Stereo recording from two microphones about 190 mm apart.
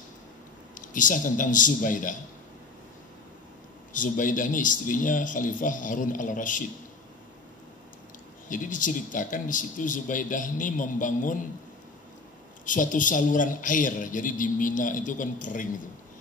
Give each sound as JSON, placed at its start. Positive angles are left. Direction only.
{"t": 0.7, "sound": "a man's voice", "side_deg": 45}
{"t": 3.9, "sound": "a man's voice", "side_deg": 45}
{"t": 8.5, "sound": "a man's voice", "side_deg": 45}
{"t": 12.6, "sound": "a man's voice", "side_deg": 45}